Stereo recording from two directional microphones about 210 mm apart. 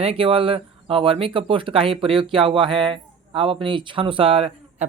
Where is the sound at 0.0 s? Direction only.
25° right (ahead or behind).